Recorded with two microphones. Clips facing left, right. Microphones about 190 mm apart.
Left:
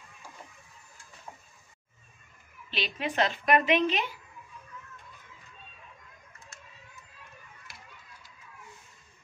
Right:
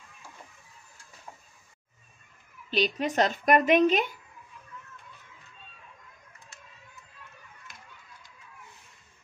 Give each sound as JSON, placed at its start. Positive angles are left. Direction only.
{"t": 2.7, "sound": "a woman's voice", "side_deg": -45}